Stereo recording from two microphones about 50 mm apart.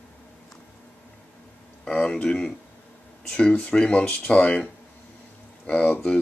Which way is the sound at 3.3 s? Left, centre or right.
Left.